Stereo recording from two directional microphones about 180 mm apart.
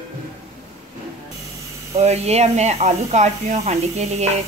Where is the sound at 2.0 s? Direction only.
35° right (ahead or behind).